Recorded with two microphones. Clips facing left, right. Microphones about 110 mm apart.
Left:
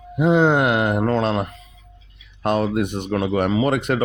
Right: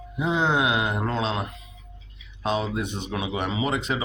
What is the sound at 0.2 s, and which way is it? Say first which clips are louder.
Speech: left 7 dB; 60° left (ahead or behind).